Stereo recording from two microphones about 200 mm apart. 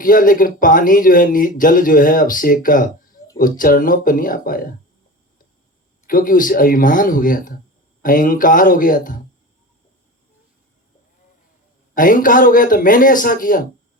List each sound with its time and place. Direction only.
0.0 s speech: 45° left (ahead or behind)
6.1 s speech: 45° left (ahead or behind)
11.9 s speech: 45° left (ahead or behind)